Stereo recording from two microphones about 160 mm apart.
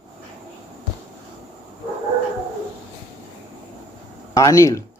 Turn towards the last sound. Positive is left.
turn(degrees=20)  # may be behind; listen again after turning